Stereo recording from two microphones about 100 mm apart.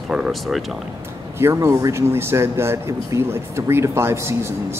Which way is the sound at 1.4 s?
25° right (ahead or behind).